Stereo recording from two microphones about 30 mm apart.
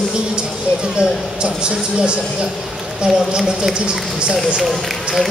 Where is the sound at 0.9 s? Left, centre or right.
Right.